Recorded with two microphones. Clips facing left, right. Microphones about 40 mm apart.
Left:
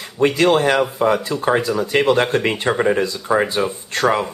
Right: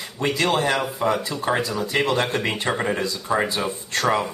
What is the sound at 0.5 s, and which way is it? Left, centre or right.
Speech, left.